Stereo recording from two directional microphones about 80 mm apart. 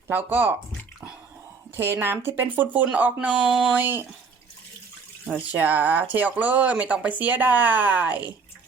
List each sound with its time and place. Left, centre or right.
0.1 s speech: right
1.7 s speech: right; by 3.8 s centre
3.8 s speech: right
5.3 s speech: right